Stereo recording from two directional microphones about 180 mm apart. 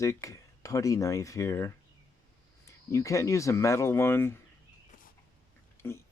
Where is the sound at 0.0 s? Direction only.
15° left (ahead or behind).